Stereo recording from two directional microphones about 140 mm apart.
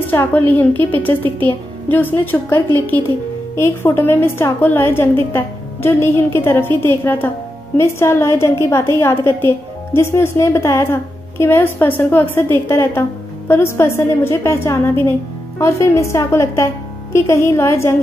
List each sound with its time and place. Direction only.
0.0 s a woman's voice: 15° left (ahead or behind)